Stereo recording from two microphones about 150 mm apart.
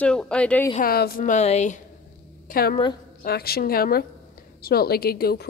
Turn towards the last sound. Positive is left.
turn(degrees=90)